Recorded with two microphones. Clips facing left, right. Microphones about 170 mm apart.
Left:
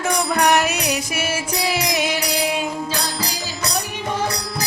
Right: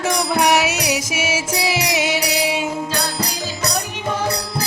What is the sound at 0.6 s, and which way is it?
Music, 80° right.